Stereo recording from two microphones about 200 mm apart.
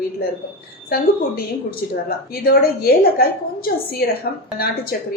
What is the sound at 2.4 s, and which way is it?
Speech, 50° left (ahead or behind).